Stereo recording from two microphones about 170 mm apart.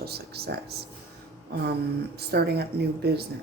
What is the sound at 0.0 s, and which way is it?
Speech, 70° right (ahead or behind).